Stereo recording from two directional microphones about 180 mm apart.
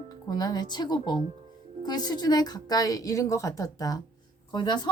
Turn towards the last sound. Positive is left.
turn(degrees=25)  # may be behind; listen again after turning